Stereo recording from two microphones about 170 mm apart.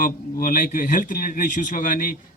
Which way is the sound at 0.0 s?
55° left (ahead or behind).